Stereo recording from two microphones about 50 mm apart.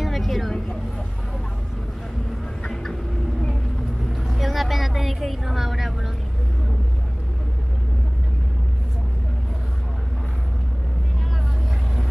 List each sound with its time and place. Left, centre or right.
0.0 s vehicle: centre
2.7 s vehicle: centre
4.3 s vehicle: centre